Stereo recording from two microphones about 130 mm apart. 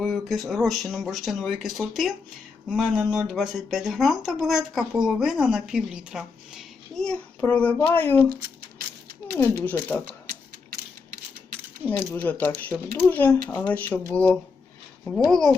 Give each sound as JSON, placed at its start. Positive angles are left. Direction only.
{"t": 0.0, "sound": "speech", "side_deg": 0}
{"t": 9.6, "sound": "speech", "side_deg": 15}
{"t": 11.9, "sound": "speech", "side_deg": 15}